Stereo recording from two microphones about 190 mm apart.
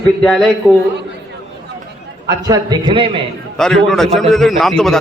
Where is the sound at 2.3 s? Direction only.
20° right (ahead or behind).